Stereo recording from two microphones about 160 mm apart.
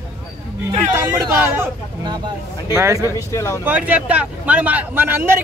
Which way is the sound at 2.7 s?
15° right (ahead or behind).